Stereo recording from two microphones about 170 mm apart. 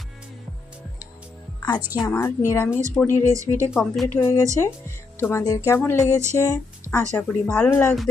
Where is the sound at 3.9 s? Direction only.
10° left (ahead or behind).